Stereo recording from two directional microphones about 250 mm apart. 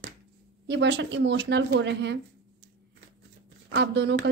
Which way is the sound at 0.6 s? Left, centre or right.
Right.